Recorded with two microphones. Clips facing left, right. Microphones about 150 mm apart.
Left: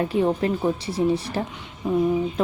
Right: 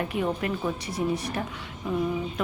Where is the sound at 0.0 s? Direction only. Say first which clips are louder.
Left 6 dB; 30° left (ahead or behind).